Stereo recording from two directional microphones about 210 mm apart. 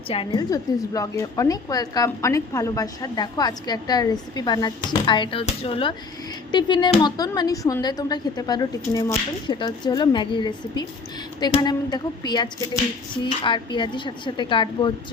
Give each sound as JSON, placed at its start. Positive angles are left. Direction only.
{"t": 0.1, "sound": "a woman's voice", "side_deg": 25}